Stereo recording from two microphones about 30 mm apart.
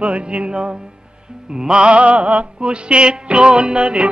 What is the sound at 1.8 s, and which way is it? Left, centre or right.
Speech, right.